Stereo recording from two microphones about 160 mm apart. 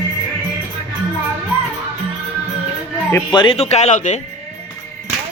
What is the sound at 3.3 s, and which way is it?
Speech, 30° left (ahead or behind).